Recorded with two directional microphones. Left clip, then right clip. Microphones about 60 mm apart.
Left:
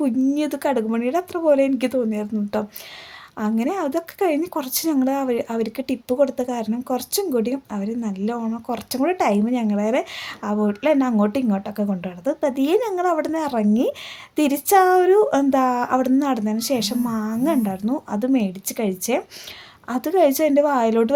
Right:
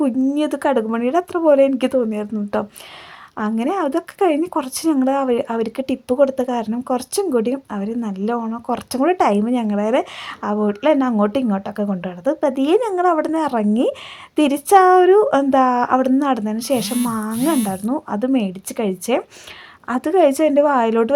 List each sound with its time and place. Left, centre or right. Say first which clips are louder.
0.3 s speech: right 3 dB; right